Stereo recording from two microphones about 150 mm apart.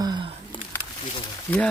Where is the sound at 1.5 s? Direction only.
10° left (ahead or behind).